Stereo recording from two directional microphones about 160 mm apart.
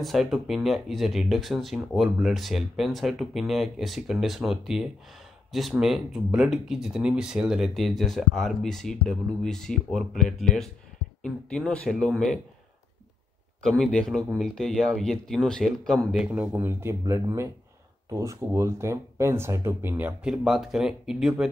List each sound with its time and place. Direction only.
0.0 s speech: centre (ahead or behind)
13.6 s speech: 5° left (ahead or behind)
16.3 s speech: 10° right (ahead or behind)